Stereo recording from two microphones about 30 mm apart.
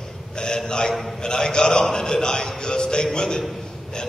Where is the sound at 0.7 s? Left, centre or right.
Left.